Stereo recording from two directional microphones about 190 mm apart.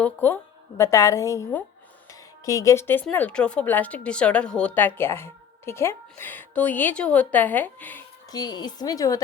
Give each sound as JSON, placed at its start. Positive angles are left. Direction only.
{"t": 0.0, "sound": "speech", "side_deg": 10}
{"t": 8.3, "sound": "a woman's voice", "side_deg": 20}